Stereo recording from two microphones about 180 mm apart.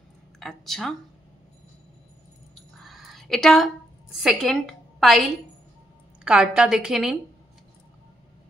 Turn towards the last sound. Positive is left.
turn(degrees=-5)  # may be behind; listen again after turning